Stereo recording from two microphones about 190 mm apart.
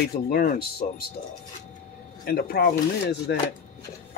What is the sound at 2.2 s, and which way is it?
Speech, 55° left (ahead or behind).